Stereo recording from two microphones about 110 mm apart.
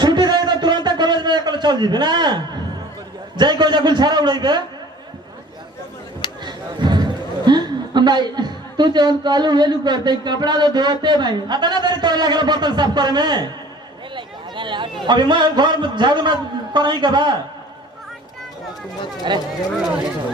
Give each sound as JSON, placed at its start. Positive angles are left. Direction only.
{"t": 0.0, "sound": "a sound", "side_deg": -40}
{"t": 3.3, "sound": "a man's voice", "side_deg": -45}
{"t": 6.4, "sound": "a man's voice", "side_deg": -40}
{"t": 19.3, "sound": "a man's voice", "side_deg": -45}